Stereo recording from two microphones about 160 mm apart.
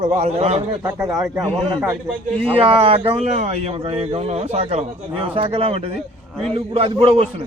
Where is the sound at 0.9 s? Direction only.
20° right (ahead or behind).